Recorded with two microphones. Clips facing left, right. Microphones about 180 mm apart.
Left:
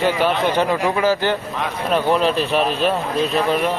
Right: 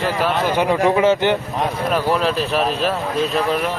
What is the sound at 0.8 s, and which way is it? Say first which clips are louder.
Speech: right 3 dB; 20° right (ahead or behind).